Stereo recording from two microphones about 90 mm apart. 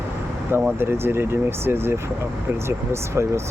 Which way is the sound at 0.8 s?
25° right (ahead or behind).